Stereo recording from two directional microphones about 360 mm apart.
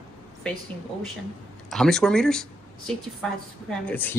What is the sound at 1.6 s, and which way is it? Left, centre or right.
Speech, centre.